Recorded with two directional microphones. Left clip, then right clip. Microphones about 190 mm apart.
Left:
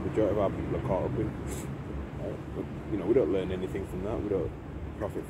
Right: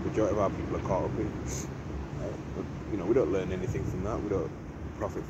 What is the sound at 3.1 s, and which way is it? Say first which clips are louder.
Speech: left 1 dB; 15° left (ahead or behind).